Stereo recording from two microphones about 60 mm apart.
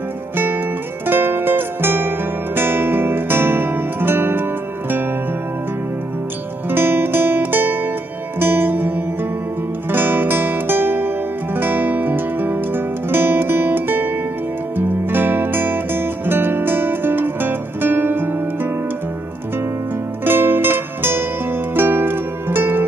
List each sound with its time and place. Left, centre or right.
1.0 s music: right
6.7 s music: right
20.2 s music: right